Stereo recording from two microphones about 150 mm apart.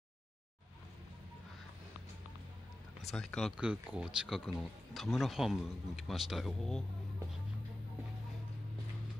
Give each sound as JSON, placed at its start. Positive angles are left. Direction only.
{"t": 3.0, "sound": "speech", "side_deg": 5}